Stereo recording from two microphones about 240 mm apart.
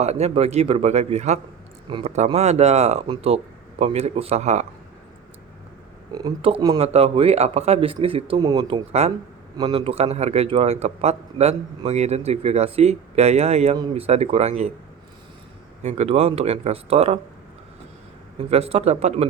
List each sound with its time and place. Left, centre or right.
0.0 s a man's voice: right
6.1 s a man's voice: centre
15.8 s a man's voice: right
18.3 s a man's voice: right